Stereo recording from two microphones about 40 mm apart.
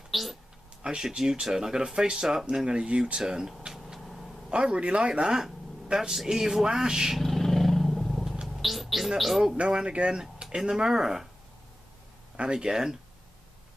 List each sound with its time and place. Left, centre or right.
0.1 s a sound: centre
0.8 s speech: centre
4.0 s a sound: centre
4.5 s speech: right
7.2 s vehicle: centre
8.5 s music: centre
9.6 s speech: right
10.4 s speech: centre
12.4 s speech: right